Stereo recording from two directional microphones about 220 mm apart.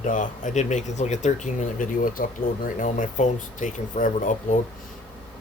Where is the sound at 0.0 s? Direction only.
35° left (ahead or behind).